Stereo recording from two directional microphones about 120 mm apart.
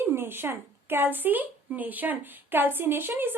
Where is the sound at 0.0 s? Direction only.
20° right (ahead or behind).